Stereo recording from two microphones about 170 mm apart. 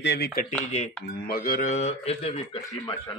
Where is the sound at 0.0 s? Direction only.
75° left (ahead or behind).